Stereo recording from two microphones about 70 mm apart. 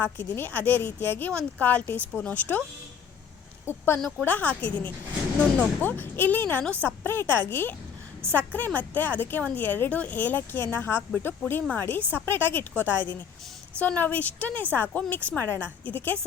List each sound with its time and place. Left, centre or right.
0.0 s a woman's voice: left
1.3 s a woman's voice: centre
3.7 s speech: left
4.2 s a woman's voice: left
6.8 s a woman's voice: left